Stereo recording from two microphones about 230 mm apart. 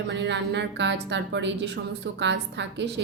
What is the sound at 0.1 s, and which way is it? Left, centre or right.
A woman's voice, right.